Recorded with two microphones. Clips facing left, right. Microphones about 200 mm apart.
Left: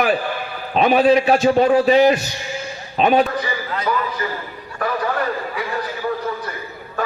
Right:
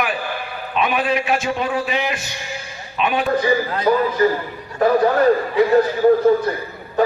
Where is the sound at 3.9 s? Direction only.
45° right (ahead or behind).